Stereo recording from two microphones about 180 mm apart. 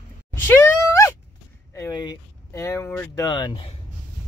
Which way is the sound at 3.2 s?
25° left (ahead or behind).